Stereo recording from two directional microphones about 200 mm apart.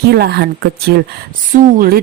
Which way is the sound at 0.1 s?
55° right (ahead or behind).